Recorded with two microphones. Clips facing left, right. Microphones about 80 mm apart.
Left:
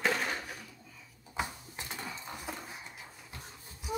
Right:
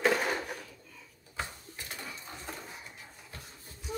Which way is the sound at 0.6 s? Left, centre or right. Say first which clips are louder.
Right 2 dB; centre.